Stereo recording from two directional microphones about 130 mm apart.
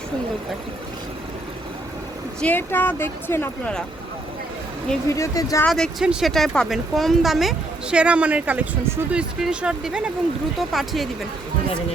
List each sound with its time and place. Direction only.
2.4 s speech: 15° left (ahead or behind)
5.0 s speech: 25° left (ahead or behind)
5.6 s speech: 5° left (ahead or behind)